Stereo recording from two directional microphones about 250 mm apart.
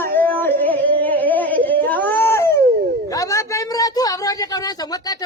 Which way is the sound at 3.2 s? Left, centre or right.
Centre.